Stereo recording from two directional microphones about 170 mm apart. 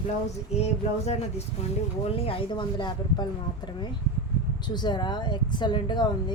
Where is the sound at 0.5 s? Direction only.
40° left (ahead or behind).